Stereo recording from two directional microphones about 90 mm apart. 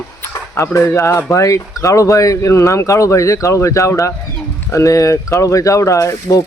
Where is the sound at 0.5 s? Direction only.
30° left (ahead or behind).